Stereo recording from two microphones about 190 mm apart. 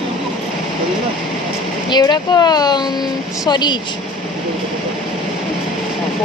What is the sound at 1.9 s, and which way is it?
Speech, 20° left (ahead or behind).